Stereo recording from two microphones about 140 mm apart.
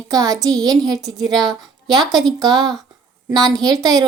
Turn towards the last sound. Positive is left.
turn(degrees=-25)  # may be behind; listen again after turning